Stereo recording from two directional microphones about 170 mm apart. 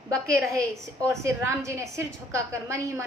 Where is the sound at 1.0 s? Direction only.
15° right (ahead or behind).